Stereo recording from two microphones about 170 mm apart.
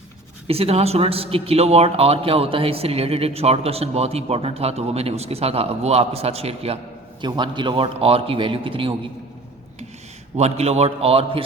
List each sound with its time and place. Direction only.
0.4 s speech: 35° right (ahead or behind)
10.3 s speech: 40° right (ahead or behind)